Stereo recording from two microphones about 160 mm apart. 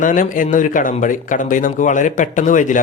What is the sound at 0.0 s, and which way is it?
Speech, 55° left (ahead or behind).